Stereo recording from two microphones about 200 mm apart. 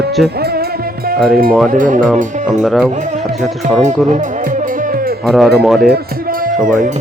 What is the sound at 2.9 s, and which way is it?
Speech, 40° right (ahead or behind).